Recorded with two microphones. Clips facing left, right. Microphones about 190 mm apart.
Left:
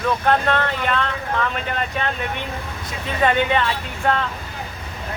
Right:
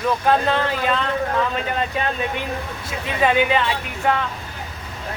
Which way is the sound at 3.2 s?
10° right (ahead or behind).